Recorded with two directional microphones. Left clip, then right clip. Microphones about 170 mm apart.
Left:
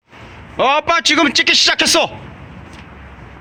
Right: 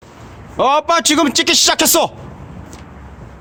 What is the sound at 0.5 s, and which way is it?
A man's voice, 15° right (ahead or behind).